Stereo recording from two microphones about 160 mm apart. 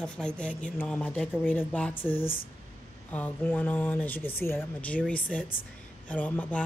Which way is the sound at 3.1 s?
10° left (ahead or behind).